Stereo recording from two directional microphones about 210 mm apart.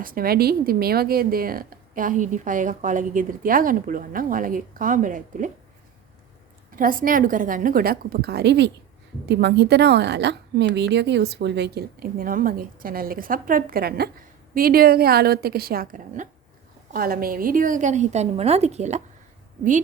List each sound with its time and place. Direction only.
0.0 s speech: 45° right (ahead or behind)
6.7 s a woman's voice: 40° right (ahead or behind)